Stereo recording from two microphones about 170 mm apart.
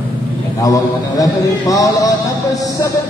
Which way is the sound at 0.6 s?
20° left (ahead or behind).